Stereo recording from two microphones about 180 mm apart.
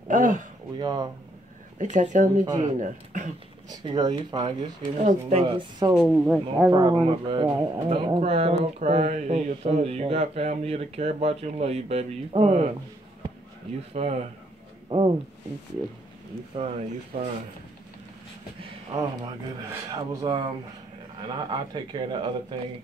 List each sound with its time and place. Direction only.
0.1 s speech: 45° right (ahead or behind)
0.7 s speech: 20° right (ahead or behind)
1.8 s speech: 45° right (ahead or behind)
2.4 s speech: 25° right (ahead or behind)
2.8 s speech: 45° right (ahead or behind)
3.7 s speech: 20° right (ahead or behind)
5.9 s speech: 5° right (ahead or behind)
6.7 s speech: 25° right (ahead or behind)
13.9 s speech: 35° right (ahead or behind)
16.5 s speech: 30° right (ahead or behind)
18.6 s speech: 25° right (ahead or behind)